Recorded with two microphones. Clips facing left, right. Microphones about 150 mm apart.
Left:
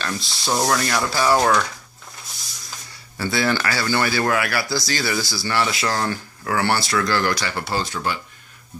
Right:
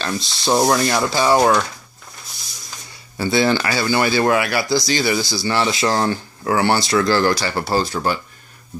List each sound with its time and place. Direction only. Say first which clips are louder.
0.0 s speech: right 4 dB; 25° right (ahead or behind)
3.2 s speech: right 4 dB; 20° right (ahead or behind); by 8.2 s 40° right (ahead or behind)